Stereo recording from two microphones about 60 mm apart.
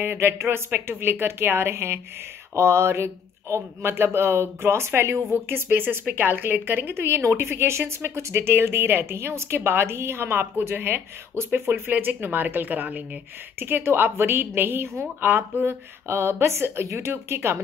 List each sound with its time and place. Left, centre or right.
0.0 s a woman's voice: right
13.6 s a woman's voice: right